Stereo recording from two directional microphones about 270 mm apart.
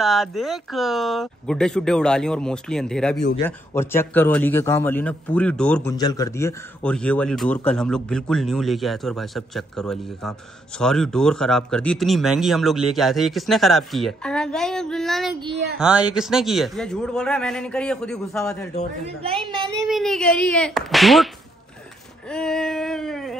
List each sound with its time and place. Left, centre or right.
0.0 s a man's voice: centre
15.5 s speech: right
15.8 s speech: centre
19.8 s speech: centre
22.3 s speech: centre